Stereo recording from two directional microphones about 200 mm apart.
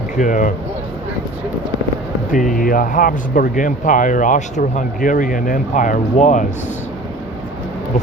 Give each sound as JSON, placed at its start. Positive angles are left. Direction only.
{"t": 0.2, "sound": "speech", "side_deg": 40}
{"t": 2.3, "sound": "speech", "side_deg": 40}